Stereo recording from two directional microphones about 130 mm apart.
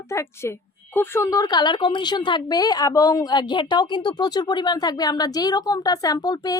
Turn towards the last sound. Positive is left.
turn(degrees=30)  # may be behind; listen again after turning